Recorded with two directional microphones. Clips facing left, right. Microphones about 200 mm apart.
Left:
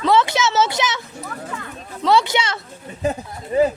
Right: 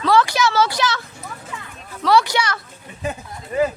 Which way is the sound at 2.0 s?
20° left (ahead or behind).